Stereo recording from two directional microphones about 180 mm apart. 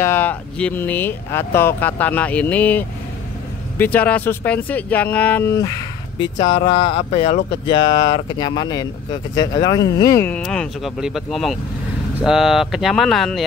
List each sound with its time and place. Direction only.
0.0 s speech: 10° left (ahead or behind)